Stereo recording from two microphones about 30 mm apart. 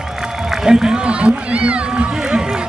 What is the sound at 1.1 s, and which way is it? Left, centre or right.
Run, right.